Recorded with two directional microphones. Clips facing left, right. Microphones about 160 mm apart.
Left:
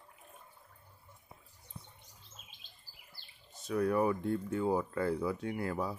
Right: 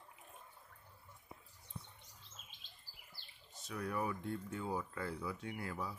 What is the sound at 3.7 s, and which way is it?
Speech, 55° left (ahead or behind).